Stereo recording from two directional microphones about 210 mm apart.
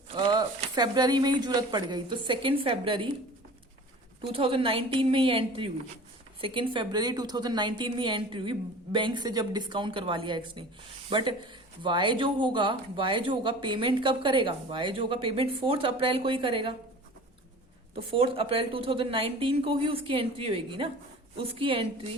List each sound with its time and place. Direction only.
0.2 s speech: 20° right (ahead or behind)
4.3 s speech: 25° right (ahead or behind)
18.1 s speech: 25° right (ahead or behind)